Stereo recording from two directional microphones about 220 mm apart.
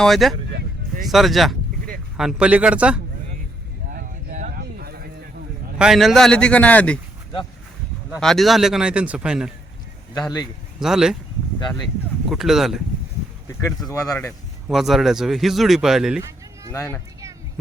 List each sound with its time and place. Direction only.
0.0 s a man's voice: centre (ahead or behind)
3.9 s a sound: 35° right (ahead or behind)
4.6 s a sound: 45° right (ahead or behind)
5.8 s a man's voice: centre (ahead or behind)
8.1 s a man's voice: centre (ahead or behind)
10.2 s speech: 15° left (ahead or behind)
10.8 s speech: centre (ahead or behind)
12.3 s a man's voice: centre (ahead or behind)
13.5 s speech: 10° left (ahead or behind)
14.7 s a man's voice: centre (ahead or behind)
16.7 s speech: 15° left (ahead or behind)